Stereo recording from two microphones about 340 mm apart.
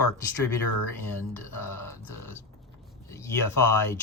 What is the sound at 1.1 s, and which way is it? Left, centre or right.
Speech, centre.